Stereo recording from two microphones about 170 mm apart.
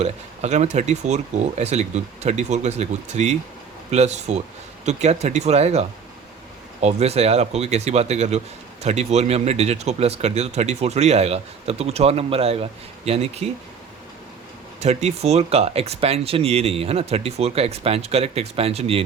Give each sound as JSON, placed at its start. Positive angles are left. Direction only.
{"t": 0.0, "sound": "speech", "side_deg": -40}
{"t": 6.8, "sound": "speech", "side_deg": -40}
{"t": 14.8, "sound": "speech", "side_deg": -40}